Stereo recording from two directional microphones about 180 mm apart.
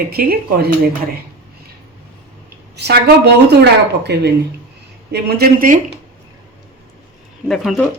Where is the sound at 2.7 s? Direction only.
65° right (ahead or behind).